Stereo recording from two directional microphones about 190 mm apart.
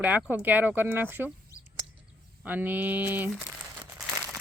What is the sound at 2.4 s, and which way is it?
Speech, 10° right (ahead or behind).